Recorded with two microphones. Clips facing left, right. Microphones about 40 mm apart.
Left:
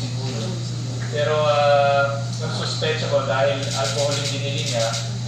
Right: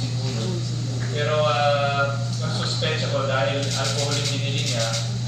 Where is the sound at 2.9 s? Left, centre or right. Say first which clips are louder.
Left 4 dB; centre.